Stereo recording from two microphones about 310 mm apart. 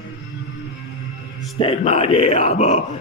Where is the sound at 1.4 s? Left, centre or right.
Centre.